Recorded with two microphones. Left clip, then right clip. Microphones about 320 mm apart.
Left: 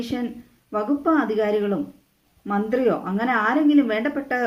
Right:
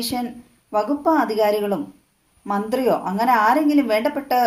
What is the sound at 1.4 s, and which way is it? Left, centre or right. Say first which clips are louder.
A woman's voice: right 3 dB; right.